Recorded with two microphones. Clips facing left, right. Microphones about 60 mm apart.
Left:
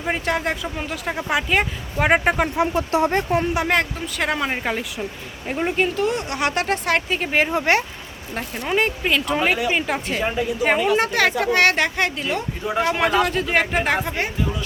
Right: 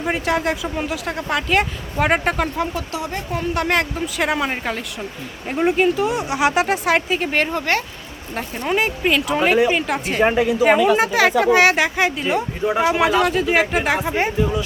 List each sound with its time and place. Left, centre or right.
0.0 s speech: centre
2.7 s speech: left
3.5 s speech: centre
7.6 s speech: left
8.4 s speech: centre
10.2 s a woman's voice: right
10.6 s speech: centre
12.2 s speech: centre
14.1 s speech: right